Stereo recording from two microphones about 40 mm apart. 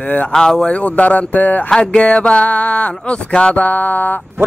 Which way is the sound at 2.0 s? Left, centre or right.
Left.